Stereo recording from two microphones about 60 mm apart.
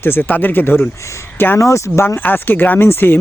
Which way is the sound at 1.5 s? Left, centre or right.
Left.